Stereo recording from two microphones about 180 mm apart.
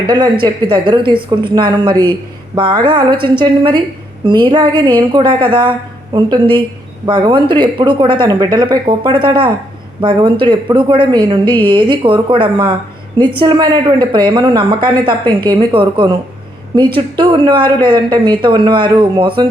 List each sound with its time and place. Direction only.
0.1 s speech: 25° right (ahead or behind)